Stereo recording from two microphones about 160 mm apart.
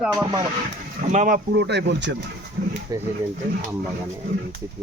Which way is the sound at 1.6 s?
90° right.